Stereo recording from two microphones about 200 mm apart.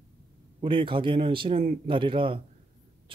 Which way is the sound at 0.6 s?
25° right (ahead or behind).